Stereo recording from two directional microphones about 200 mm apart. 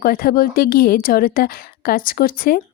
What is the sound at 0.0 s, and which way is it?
A woman's voice, 45° left (ahead or behind).